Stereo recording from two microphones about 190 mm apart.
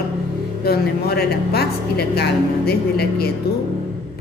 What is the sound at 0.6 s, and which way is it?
A woman's voice, 55° left (ahead or behind).